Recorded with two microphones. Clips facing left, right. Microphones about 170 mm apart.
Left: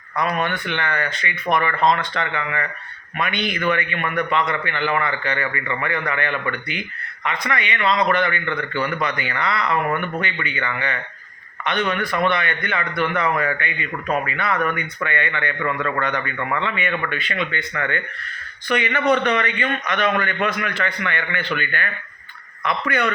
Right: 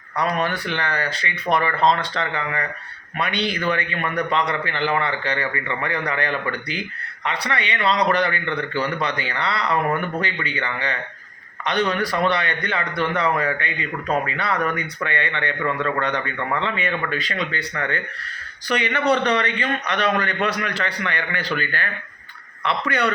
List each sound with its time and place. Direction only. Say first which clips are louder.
0.2 s a man's voice: even; 35° right (ahead or behind)